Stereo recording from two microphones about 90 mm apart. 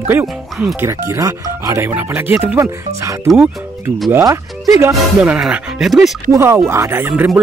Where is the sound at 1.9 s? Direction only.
20° right (ahead or behind).